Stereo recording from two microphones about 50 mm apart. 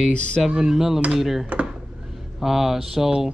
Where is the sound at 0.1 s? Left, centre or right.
Left.